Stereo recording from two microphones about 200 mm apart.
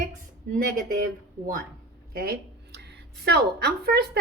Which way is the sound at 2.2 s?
50° right (ahead or behind).